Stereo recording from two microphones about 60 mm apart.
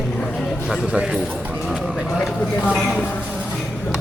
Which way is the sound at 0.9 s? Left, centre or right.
Centre.